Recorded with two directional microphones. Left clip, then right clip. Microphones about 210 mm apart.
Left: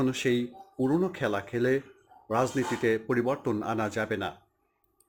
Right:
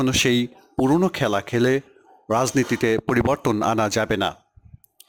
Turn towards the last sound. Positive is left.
turn(degrees=-55)  # may be behind; listen again after turning